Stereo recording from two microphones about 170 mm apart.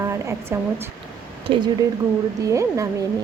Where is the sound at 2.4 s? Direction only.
20° right (ahead or behind).